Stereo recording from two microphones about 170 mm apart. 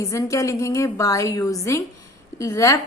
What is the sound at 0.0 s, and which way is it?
A woman's voice, 20° left (ahead or behind).